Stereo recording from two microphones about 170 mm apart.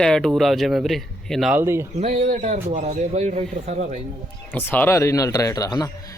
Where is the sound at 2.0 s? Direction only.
40° right (ahead or behind).